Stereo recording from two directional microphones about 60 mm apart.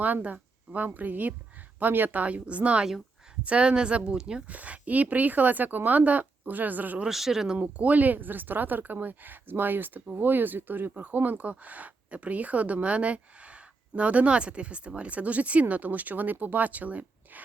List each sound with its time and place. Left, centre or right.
0.0 s a woman's voice: right
4.4 s speech: right
7.1 s speech: centre; by 17.4 s right